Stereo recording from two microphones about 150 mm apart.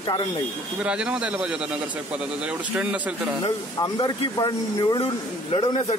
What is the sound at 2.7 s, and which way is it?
Speech, 10° right (ahead or behind).